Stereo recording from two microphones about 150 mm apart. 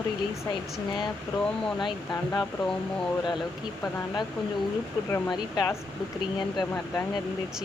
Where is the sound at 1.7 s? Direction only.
30° left (ahead or behind).